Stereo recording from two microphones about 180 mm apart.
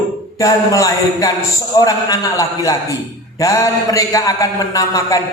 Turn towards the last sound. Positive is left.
turn(degrees=20)  # may be behind; listen again after turning